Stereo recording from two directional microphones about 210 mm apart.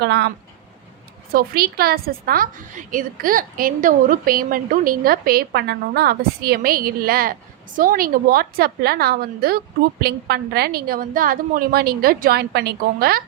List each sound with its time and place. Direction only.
0.0 s a woman's voice: 55° right (ahead or behind)
1.3 s a woman's voice: 45° right (ahead or behind)